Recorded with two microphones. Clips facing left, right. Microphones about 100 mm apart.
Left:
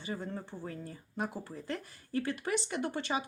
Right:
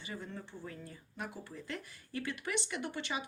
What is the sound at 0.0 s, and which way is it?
Speech, 35° left (ahead or behind).